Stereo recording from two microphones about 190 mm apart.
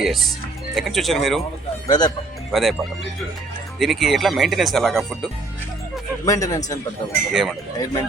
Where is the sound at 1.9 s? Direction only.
20° left (ahead or behind).